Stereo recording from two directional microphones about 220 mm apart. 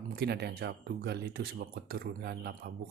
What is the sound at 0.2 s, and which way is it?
Speech, 50° right (ahead or behind).